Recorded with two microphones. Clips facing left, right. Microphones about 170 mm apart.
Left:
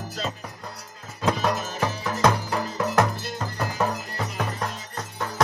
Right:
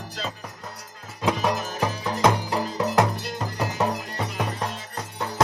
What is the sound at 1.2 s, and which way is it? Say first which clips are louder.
Music: even; 5° right (ahead or behind).